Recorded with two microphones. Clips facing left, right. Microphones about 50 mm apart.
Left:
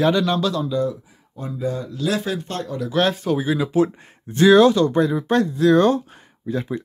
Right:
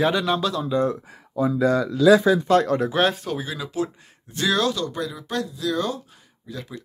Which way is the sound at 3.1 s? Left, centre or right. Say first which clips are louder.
Left 6 dB; centre.